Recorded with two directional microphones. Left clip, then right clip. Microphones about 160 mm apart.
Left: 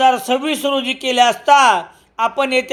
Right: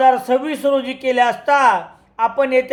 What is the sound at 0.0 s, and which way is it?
A man's voice, 25° left (ahead or behind).